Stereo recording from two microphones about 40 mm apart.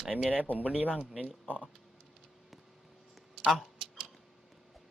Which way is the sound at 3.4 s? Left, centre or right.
Centre.